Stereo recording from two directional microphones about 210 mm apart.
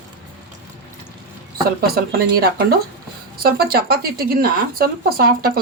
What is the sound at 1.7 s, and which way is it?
Speech, 45° right (ahead or behind).